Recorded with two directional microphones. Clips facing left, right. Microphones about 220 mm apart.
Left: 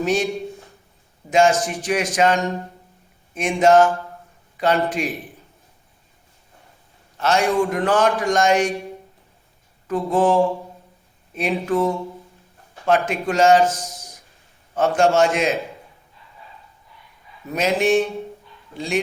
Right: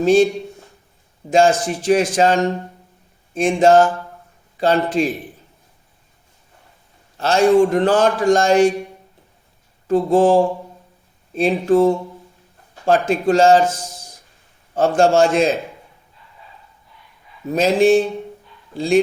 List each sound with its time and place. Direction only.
0.0 s speech: 30° right (ahead or behind)
1.3 s a man's voice: 30° right (ahead or behind)
7.2 s a man's voice: 30° right (ahead or behind)
9.8 s a man's voice: 30° right (ahead or behind)
17.4 s a sound: 30° right (ahead or behind)
17.7 s a man's voice: 30° right (ahead or behind)